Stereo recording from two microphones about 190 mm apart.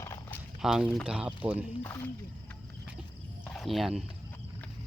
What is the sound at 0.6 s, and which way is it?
Speech, 5° right (ahead or behind).